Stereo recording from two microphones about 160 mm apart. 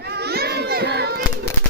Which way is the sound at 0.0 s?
90° right.